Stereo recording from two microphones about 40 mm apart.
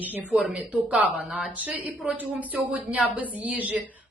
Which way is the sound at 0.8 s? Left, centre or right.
Right.